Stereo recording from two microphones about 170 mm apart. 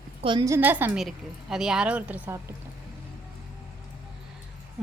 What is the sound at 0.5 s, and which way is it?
A woman's voice, 10° right (ahead or behind).